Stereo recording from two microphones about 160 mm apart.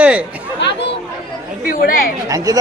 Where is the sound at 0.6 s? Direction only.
90° left.